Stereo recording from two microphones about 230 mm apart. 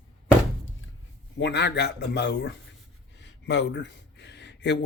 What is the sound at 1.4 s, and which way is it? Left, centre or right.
A man's voice, left.